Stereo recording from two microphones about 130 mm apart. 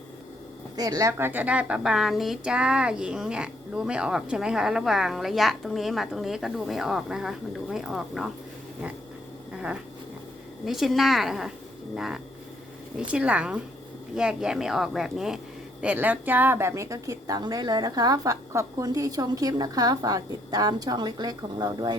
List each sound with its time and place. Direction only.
0.8 s a woman's voice: 25° right (ahead or behind); by 8.3 s 5° right (ahead or behind)
10.7 s a woman's voice: centre (ahead or behind); by 21.9 s 30° right (ahead or behind)